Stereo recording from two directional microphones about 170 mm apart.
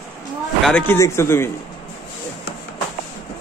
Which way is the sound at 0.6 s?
10° left (ahead or behind).